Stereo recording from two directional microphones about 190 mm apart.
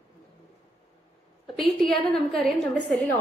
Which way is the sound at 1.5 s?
Centre (ahead or behind).